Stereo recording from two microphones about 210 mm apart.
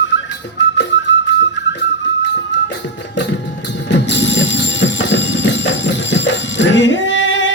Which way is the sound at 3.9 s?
60° left (ahead or behind).